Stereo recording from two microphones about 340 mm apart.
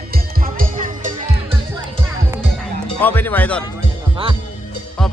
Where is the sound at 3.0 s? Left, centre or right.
Centre.